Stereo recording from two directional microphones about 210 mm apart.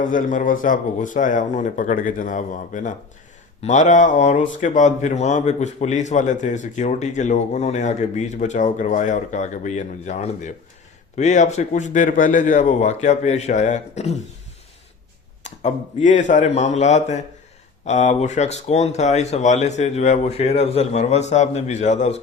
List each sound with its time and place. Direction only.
0.0 s a man's voice: 40° left (ahead or behind)
15.4 s a man's voice: 35° left (ahead or behind)